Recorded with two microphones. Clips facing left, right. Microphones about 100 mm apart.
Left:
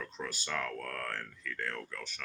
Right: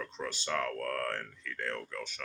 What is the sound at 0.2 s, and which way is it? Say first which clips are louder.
Speech: right 3 dB; 25° right (ahead or behind).